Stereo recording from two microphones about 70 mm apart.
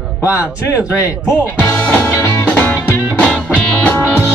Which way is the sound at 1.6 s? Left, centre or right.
Left.